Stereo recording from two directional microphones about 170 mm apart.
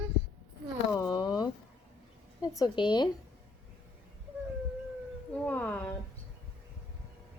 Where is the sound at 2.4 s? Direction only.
20° left (ahead or behind).